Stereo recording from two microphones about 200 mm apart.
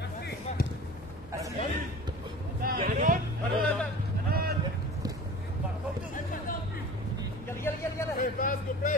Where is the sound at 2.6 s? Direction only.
45° right (ahead or behind).